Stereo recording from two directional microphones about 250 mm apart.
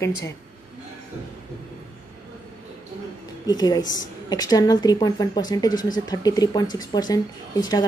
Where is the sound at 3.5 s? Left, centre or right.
Centre.